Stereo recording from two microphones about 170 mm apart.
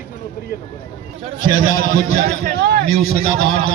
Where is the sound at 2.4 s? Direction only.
65° right (ahead or behind).